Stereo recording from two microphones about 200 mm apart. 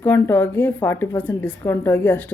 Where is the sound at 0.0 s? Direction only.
10° left (ahead or behind).